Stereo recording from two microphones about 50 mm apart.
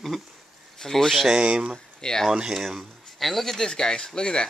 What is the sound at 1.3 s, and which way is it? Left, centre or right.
Speech, right.